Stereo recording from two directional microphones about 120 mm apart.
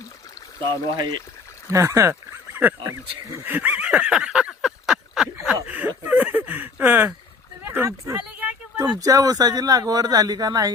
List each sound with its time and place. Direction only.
0.7 s speech: 40° right (ahead or behind)
1.7 s speech: 25° right (ahead or behind)
3.4 s a sound: 15° right (ahead or behind)
5.6 s speech: 15° right (ahead or behind)
8.4 s a sound: 15° right (ahead or behind)
8.8 s speech: 35° right (ahead or behind)